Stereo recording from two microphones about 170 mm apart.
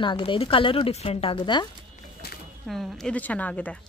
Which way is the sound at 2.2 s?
70° left (ahead or behind).